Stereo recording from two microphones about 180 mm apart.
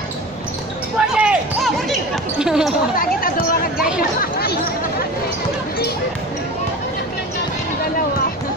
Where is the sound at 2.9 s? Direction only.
50° left (ahead or behind).